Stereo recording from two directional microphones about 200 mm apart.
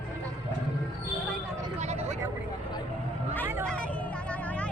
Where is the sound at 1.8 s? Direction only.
35° right (ahead or behind).